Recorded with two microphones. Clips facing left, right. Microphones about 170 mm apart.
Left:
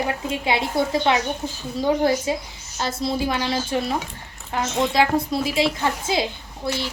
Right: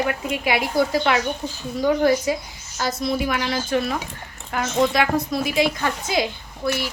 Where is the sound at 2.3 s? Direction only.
25° left (ahead or behind).